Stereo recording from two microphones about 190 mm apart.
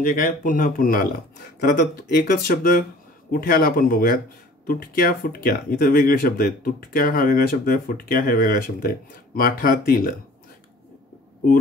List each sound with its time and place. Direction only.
0.0 s speech: 45° left (ahead or behind)